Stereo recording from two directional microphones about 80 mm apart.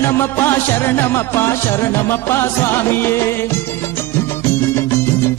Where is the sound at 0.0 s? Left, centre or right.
Left.